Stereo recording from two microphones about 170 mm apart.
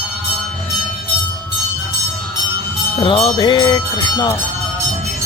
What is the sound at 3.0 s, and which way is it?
Bell, 30° left (ahead or behind).